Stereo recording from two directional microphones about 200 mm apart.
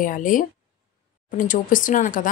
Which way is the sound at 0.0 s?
40° left (ahead or behind).